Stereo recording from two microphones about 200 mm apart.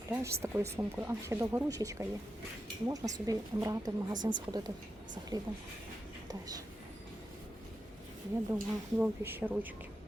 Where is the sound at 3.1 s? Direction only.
15° right (ahead or behind).